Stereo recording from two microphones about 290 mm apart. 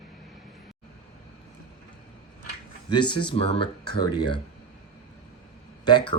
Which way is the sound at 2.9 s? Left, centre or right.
Centre.